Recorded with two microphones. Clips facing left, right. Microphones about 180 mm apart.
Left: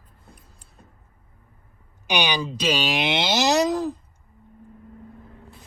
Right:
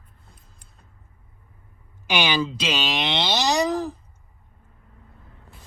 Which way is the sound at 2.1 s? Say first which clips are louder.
Right 1 dB; 15° left (ahead or behind).